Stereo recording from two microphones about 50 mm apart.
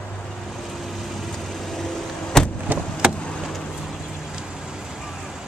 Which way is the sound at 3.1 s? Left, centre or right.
Centre.